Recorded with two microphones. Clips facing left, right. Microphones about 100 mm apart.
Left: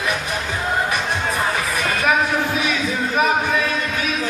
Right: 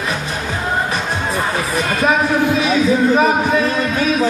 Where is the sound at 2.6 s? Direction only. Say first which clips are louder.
Right 8 dB; 30° right (ahead or behind).